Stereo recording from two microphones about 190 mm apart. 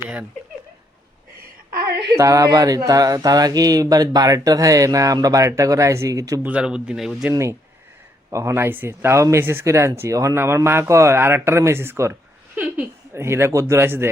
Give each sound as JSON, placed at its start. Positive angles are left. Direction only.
{"t": 2.1, "sound": "speech", "side_deg": -15}
{"t": 6.5, "sound": "speech", "side_deg": -5}
{"t": 8.3, "sound": "speech", "side_deg": -15}